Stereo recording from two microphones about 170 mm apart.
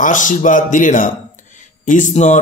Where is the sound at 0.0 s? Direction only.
50° left (ahead or behind).